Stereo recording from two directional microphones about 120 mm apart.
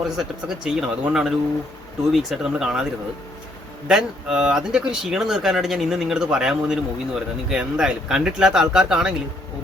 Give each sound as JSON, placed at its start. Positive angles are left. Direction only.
{"t": 0.2, "sound": "speech", "side_deg": -5}
{"t": 3.8, "sound": "speech", "side_deg": -5}